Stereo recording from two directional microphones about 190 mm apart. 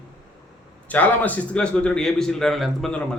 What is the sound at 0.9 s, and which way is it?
A man's voice, 10° left (ahead or behind).